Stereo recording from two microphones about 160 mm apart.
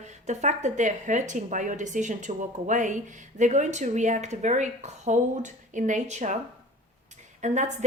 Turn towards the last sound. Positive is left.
turn(degrees=-50)  # may be behind; listen again after turning